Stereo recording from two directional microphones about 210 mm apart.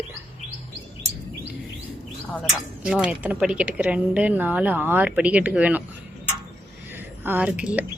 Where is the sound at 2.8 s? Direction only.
5° right (ahead or behind).